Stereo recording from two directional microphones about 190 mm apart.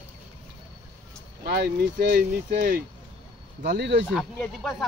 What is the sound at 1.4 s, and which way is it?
Speech, 55° right (ahead or behind).